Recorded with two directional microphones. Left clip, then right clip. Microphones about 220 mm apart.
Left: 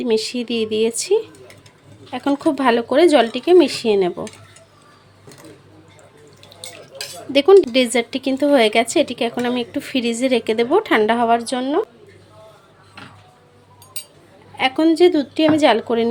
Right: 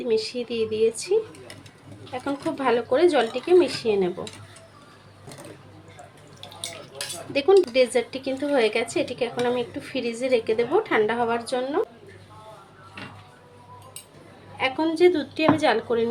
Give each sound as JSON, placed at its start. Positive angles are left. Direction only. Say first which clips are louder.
{"t": 0.0, "sound": "speech", "louder": "left 5 dB", "side_deg": 50}
{"t": 7.3, "sound": "speech", "louder": "left 6 dB", "side_deg": 45}
{"t": 14.6, "sound": "a woman's voice", "louder": "left 6 dB", "side_deg": 45}